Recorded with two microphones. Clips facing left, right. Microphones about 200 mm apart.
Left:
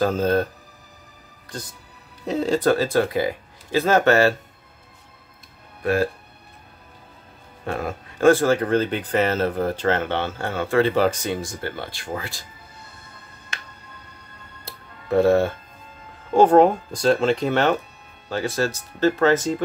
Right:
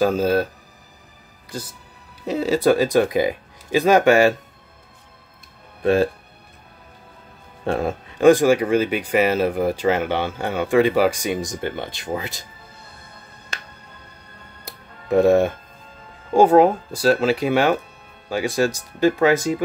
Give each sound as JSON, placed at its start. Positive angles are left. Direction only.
{"t": 0.0, "sound": "speech", "side_deg": -10}
{"t": 2.2, "sound": "speech", "side_deg": 0}
{"t": 5.8, "sound": "speech", "side_deg": -25}
{"t": 7.6, "sound": "speech", "side_deg": -30}
{"t": 8.2, "sound": "speech", "side_deg": -15}
{"t": 13.5, "sound": "music", "side_deg": -35}
{"t": 14.6, "sound": "music", "side_deg": -15}
{"t": 16.3, "sound": "speech", "side_deg": -5}